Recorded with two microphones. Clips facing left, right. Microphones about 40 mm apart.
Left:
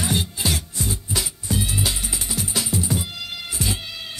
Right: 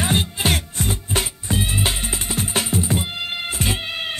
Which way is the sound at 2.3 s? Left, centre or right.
Right.